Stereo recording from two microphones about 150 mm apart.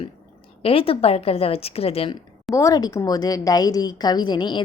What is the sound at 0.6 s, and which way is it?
A woman's voice, 40° left (ahead or behind).